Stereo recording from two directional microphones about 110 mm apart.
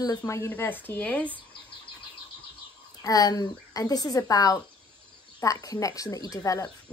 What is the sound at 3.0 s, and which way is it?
Speech, 35° left (ahead or behind).